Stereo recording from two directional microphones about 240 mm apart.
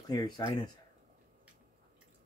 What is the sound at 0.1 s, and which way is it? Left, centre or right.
Speech, centre.